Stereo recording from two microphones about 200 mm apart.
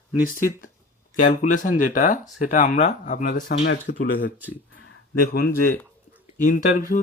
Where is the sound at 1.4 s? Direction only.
40° left (ahead or behind).